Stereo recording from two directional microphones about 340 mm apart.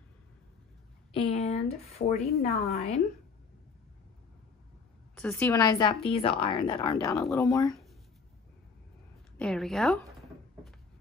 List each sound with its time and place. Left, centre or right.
1.1 s speech: centre
5.1 s speech: centre
9.4 s a woman's voice: centre